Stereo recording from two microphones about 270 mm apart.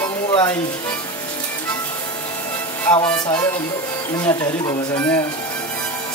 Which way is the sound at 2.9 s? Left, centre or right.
Centre.